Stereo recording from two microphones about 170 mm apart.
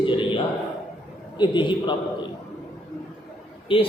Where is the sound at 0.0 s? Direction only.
30° left (ahead or behind).